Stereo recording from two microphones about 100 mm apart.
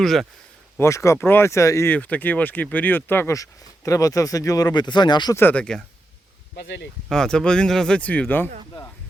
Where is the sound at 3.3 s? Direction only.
35° left (ahead or behind); by 5.3 s 50° left (ahead or behind).